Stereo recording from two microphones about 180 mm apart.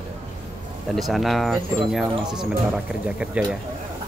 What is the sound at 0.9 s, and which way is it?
Speech, centre (ahead or behind).